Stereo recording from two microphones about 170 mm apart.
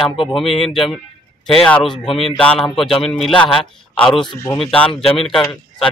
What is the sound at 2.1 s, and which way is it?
Speech, 30° left (ahead or behind).